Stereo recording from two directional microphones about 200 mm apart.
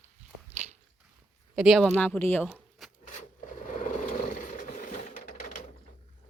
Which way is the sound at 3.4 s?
30° left (ahead or behind).